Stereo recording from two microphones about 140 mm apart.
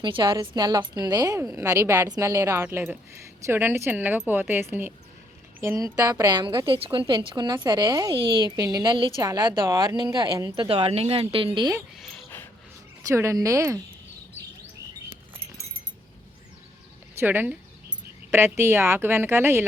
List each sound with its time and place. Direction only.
0.0 s a woman's voice: 35° right (ahead or behind)
10.7 s speech: 45° right (ahead or behind)
11.9 s cricket: 5° left (ahead or behind)
13.0 s a woman's voice: 20° right (ahead or behind)
17.2 s speech: 15° right (ahead or behind)